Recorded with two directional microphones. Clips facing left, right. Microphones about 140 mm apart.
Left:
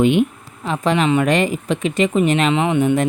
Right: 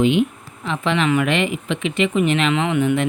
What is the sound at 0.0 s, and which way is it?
Speech, 50° left (ahead or behind).